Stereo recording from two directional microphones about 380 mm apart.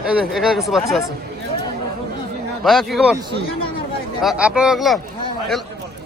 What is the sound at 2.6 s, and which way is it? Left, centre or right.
Speech, centre.